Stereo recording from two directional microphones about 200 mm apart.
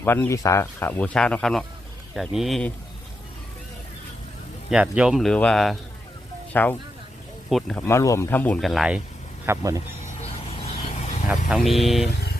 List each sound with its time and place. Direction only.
0.0 s speech: 10° left (ahead or behind)
4.7 s speech: 5° right (ahead or behind)
7.9 s speech: 15° left (ahead or behind); by 9.0 s centre (ahead or behind)
9.5 s speech: 15° right (ahead or behind)
10.5 s vehicle: 30° left (ahead or behind)
11.3 s speech: centre (ahead or behind)
12.0 s vehicle: 55° left (ahead or behind)